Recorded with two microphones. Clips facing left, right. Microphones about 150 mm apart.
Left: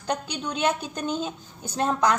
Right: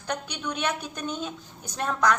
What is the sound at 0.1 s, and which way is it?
A woman's voice, 30° left (ahead or behind).